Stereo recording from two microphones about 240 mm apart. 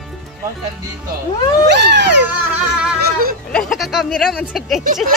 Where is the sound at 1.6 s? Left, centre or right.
Right.